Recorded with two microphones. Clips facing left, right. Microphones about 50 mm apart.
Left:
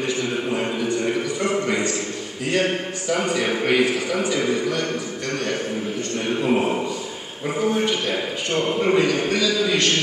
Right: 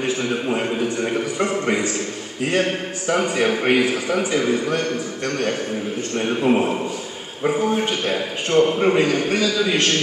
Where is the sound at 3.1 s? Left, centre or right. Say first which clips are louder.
Right 3 dB; right.